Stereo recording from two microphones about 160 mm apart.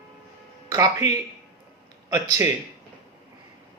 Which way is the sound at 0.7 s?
20° right (ahead or behind).